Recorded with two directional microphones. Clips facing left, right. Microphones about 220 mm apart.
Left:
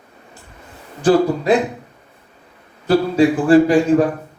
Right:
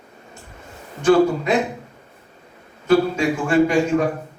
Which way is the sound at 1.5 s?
35° left (ahead or behind).